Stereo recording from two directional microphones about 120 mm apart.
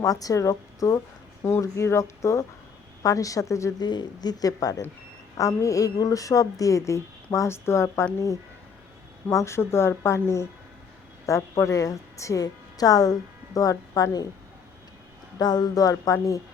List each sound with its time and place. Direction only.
0.0 s a woman's voice: 30° left (ahead or behind)
3.8 s a woman's voice: 35° left (ahead or behind)
9.3 s a woman's voice: 25° left (ahead or behind)
15.4 s speech: 35° left (ahead or behind)